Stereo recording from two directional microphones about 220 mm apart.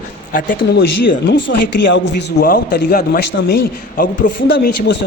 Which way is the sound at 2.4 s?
40° left (ahead or behind).